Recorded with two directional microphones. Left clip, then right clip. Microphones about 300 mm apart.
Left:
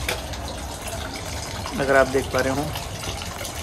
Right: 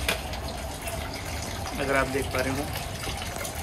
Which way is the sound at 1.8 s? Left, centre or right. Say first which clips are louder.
Left 8 dB; left.